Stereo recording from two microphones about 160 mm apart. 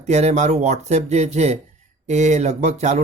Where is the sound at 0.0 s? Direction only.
45° right (ahead or behind).